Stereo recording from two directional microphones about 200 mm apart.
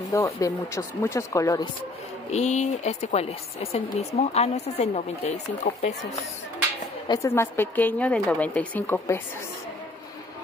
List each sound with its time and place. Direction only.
0.1 s a woman's voice: 15° left (ahead or behind)
2.3 s a woman's voice: 35° left (ahead or behind)
7.1 s a woman's voice: 15° left (ahead or behind)